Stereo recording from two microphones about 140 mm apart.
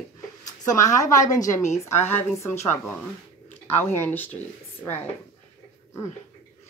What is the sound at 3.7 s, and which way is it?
Speech, 15° left (ahead or behind).